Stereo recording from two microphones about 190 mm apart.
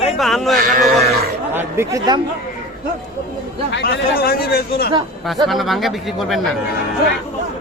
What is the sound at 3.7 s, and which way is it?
Speech, 60° left (ahead or behind).